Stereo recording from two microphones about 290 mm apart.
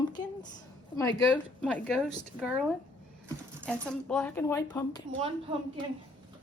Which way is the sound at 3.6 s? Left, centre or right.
Centre.